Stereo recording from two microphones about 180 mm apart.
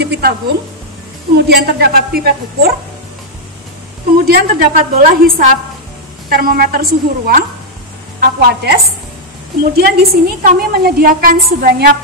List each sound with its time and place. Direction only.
0.0 s a sound: 65° right (ahead or behind)
1.3 s a woman's voice: 60° right (ahead or behind)
4.3 s a woman's voice: 55° right (ahead or behind)